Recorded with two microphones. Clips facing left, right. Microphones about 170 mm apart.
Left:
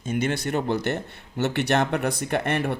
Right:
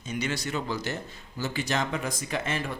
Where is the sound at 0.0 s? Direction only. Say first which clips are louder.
Left 6 dB; 50° left (ahead or behind).